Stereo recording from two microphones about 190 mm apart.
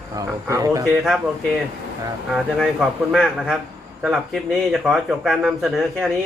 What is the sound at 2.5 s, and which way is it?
Speech, centre (ahead or behind).